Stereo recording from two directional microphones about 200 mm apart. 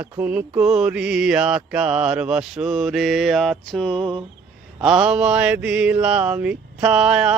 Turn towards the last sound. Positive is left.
turn(degrees=-5)  # may be behind; listen again after turning